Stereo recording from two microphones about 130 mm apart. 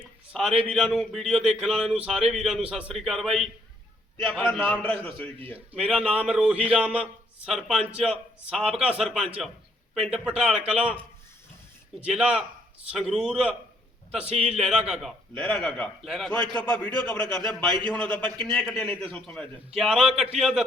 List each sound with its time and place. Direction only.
0.0 s a sound: centre (ahead or behind)
0.7 s a man's voice: centre (ahead or behind)
5.7 s a man's voice: 5° right (ahead or behind)
12.0 s speech: 5° right (ahead or behind)
15.4 s speech: 5° left (ahead or behind)
16.4 s a man's voice: 35° right (ahead or behind)
17.9 s a man's voice: 10° left (ahead or behind); by 20.7 s 5° right (ahead or behind)